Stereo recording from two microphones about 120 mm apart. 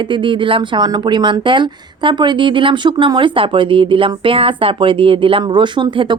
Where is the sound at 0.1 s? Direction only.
45° right (ahead or behind).